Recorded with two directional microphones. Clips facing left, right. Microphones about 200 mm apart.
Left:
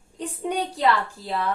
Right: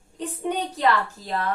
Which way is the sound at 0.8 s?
10° left (ahead or behind).